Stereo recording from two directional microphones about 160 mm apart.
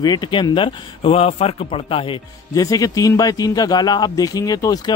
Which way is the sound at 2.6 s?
20° left (ahead or behind).